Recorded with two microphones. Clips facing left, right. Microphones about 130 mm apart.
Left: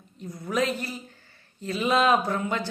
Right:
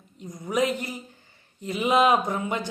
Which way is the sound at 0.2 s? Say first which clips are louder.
Right 2 dB; 15° right (ahead or behind).